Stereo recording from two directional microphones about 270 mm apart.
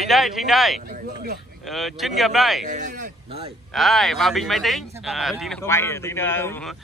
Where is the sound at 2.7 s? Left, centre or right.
Right.